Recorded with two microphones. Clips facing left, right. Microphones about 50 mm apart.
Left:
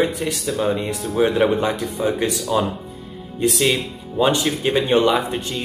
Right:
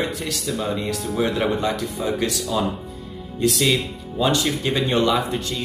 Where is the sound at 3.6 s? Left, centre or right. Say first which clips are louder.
Left 1 dB; centre.